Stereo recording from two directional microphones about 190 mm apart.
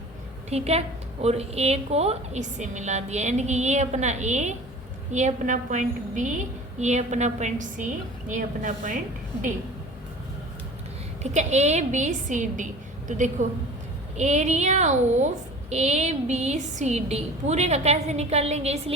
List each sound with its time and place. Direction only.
0.5 s a woman's voice: 35° right (ahead or behind)
11.2 s a woman's voice: 35° right (ahead or behind)